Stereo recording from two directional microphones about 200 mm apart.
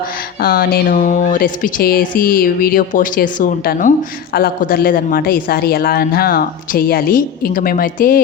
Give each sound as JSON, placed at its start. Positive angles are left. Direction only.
{"t": 0.4, "sound": "speech", "side_deg": 45}